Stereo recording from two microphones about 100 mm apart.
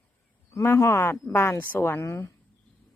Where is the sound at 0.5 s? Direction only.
25° left (ahead or behind).